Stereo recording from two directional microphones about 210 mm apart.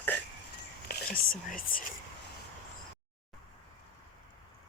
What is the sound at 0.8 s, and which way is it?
Whispering, 45° left (ahead or behind).